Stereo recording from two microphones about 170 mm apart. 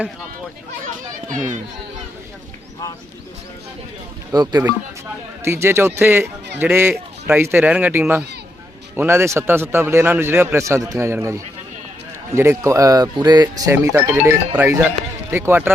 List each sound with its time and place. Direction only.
4.3 s speech: 25° right (ahead or behind)